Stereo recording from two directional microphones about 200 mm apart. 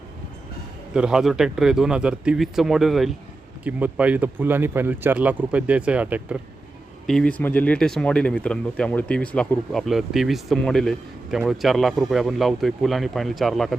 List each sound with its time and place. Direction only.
0.9 s speech: 5° right (ahead or behind)
7.1 s speech: 5° left (ahead or behind)